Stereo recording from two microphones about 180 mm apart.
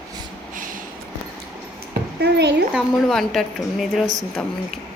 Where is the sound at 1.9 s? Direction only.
70° right (ahead or behind).